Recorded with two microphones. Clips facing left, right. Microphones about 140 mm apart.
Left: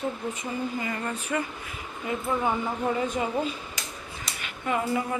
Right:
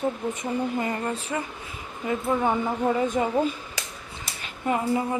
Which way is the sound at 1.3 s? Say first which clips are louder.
Left 4 dB; 20° right (ahead or behind).